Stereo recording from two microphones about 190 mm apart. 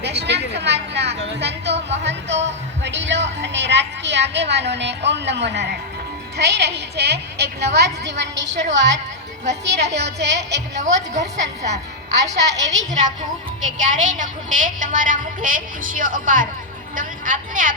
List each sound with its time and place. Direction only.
0.2 s a woman's voice: 60° right (ahead or behind)
10.8 s a woman's voice: 40° right (ahead or behind)
12.4 s a woman's voice: 65° right (ahead or behind)
12.6 s a woman's voice: 40° right (ahead or behind)